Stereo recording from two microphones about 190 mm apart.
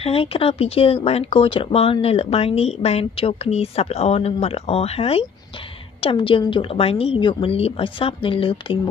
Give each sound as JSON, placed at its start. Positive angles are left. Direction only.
{"t": 0.0, "sound": "a woman's voice", "side_deg": 30}